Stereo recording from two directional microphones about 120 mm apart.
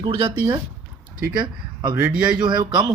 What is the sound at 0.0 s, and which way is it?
Speech, 40° right (ahead or behind).